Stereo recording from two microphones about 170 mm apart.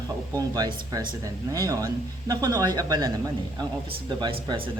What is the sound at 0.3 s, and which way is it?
Speech, 20° right (ahead or behind).